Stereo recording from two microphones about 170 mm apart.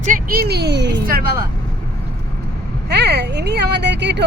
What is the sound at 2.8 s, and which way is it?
Speech, 80° right.